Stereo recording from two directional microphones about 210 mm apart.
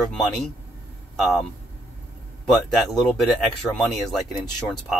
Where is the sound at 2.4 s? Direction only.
Centre (ahead or behind).